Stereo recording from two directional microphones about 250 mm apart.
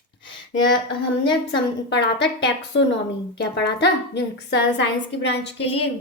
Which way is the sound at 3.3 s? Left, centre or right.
Left.